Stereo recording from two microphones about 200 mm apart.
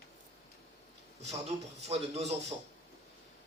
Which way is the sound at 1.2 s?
30° right (ahead or behind).